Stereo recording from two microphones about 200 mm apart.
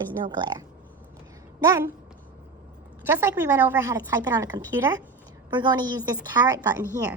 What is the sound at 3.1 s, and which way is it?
A woman's voice, 10° right (ahead or behind).